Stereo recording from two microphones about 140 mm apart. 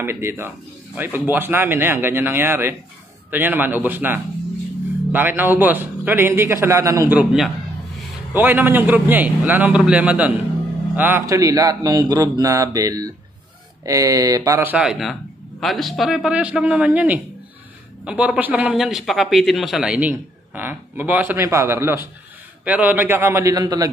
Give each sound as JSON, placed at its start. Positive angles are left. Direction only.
{"t": 0.0, "sound": "a man's voice", "side_deg": -15}
{"t": 7.2, "sound": "speech", "side_deg": 0}
{"t": 8.3, "sound": "a man's voice", "side_deg": -15}
{"t": 14.7, "sound": "a man's voice", "side_deg": -5}